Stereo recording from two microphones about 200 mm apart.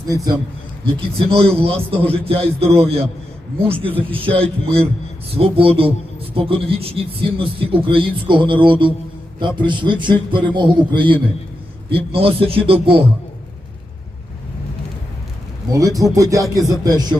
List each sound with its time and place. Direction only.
0.9 s a man's voice: 30° right (ahead or behind)
15.7 s music: 15° right (ahead or behind)
16.8 s a man's voice: 20° right (ahead or behind)